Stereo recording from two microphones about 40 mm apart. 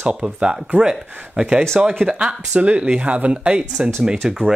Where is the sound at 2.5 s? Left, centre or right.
Right.